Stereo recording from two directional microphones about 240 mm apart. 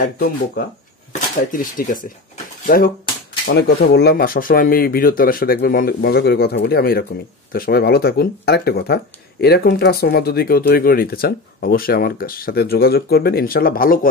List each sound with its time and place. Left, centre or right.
0.0 s speech: left